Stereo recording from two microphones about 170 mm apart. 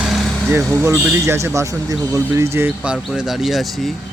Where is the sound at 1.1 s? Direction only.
15° right (ahead or behind).